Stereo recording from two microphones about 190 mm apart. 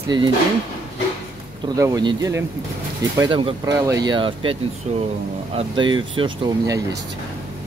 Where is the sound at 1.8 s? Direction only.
20° right (ahead or behind).